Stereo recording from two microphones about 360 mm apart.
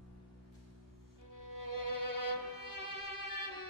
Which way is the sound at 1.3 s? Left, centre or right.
Left.